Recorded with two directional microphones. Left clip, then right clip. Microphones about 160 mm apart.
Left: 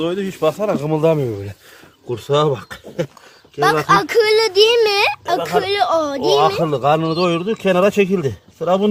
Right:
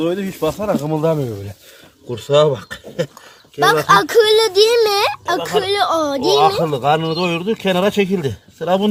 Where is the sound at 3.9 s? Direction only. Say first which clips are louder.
Right 3 dB; 25° right (ahead or behind).